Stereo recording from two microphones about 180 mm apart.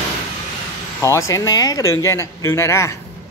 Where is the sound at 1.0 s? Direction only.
15° left (ahead or behind).